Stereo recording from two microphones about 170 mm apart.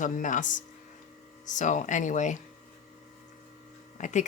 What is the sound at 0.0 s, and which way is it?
Speech, 50° left (ahead or behind).